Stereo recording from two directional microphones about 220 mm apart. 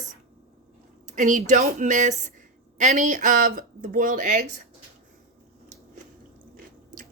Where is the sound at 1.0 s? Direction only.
35° right (ahead or behind).